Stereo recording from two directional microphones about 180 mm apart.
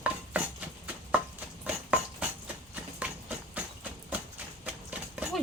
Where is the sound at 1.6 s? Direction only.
5° right (ahead or behind).